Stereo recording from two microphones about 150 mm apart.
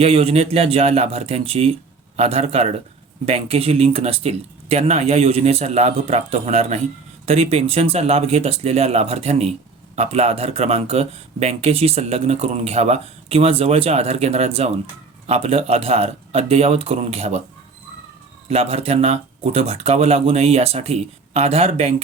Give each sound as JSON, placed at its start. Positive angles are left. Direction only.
{"t": 0.0, "sound": "speech", "side_deg": -40}
{"t": 18.4, "sound": "speech", "side_deg": -45}